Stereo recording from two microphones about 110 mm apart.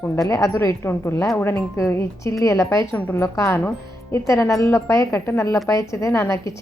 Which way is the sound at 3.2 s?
25° left (ahead or behind).